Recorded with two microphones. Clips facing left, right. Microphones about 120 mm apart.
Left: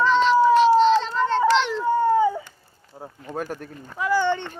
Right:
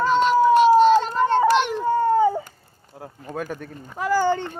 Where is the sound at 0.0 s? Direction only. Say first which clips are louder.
Even; 50° right (ahead or behind).